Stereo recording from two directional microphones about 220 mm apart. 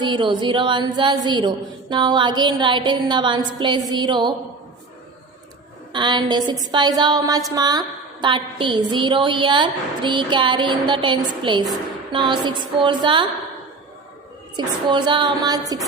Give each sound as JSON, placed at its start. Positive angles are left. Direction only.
{"t": 0.0, "sound": "a woman's voice", "side_deg": -20}
{"t": 5.9, "sound": "a woman's voice", "side_deg": -20}
{"t": 14.5, "sound": "a woman's voice", "side_deg": -20}